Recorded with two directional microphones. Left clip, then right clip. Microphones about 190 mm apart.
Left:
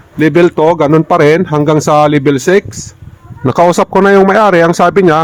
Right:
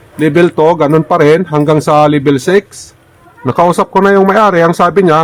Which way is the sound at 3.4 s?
45° left (ahead or behind).